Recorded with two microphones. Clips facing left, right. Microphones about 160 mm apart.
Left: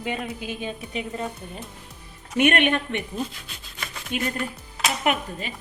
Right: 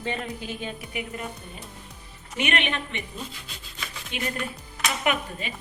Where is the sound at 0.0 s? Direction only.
15° left (ahead or behind).